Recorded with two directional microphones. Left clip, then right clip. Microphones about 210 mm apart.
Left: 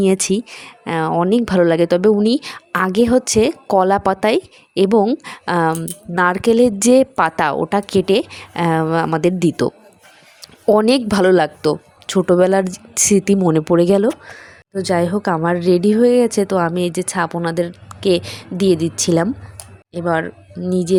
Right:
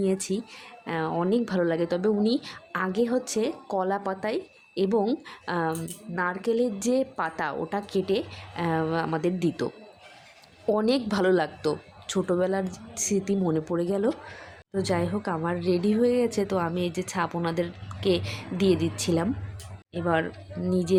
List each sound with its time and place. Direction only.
0.0 s a woman's voice: 40° left (ahead or behind)
14.1 s a woman's voice: 25° left (ahead or behind)